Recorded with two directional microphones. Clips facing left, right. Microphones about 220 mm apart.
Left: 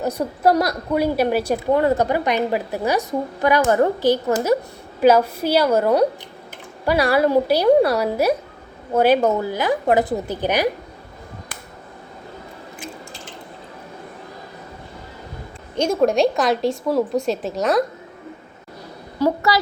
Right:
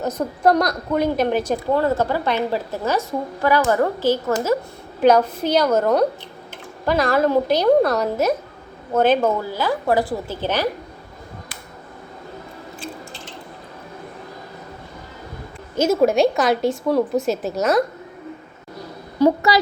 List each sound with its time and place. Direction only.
0.0 s a woman's voice: 10° left (ahead or behind)
15.7 s a woman's voice: 5° right (ahead or behind)
19.2 s a woman's voice: 20° right (ahead or behind)